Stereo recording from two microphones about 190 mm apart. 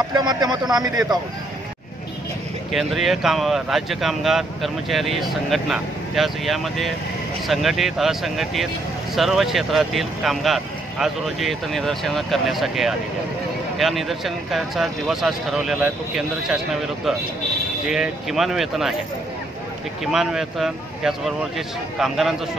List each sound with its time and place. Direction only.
0.1 s speech: 20° right (ahead or behind)
2.7 s speech: centre (ahead or behind)
17.8 s speech: centre (ahead or behind)
20.1 s speech: centre (ahead or behind)